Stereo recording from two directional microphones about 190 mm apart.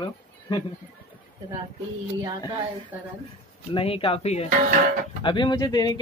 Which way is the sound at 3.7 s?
30° left (ahead or behind).